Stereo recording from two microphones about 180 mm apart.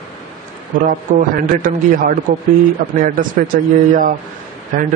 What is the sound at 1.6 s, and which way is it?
Speech, 50° right (ahead or behind).